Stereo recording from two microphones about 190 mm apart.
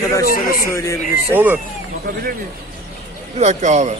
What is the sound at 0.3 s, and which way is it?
Speech, 50° left (ahead or behind).